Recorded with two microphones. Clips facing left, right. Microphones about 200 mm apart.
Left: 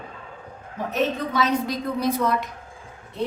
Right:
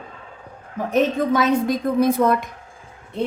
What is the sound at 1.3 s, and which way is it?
A woman's voice, 50° right (ahead or behind).